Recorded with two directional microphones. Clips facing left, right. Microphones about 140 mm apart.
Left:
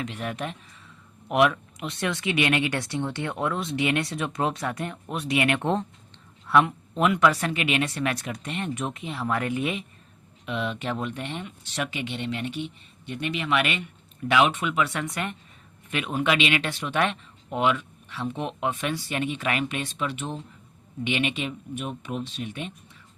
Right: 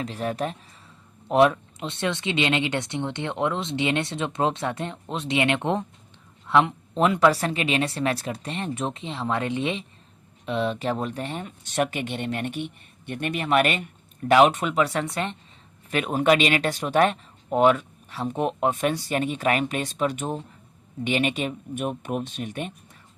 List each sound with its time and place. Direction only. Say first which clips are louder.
0.0 s speech: right 4 dB; 35° right (ahead or behind)
15.9 s speech: right 5 dB; 40° right (ahead or behind)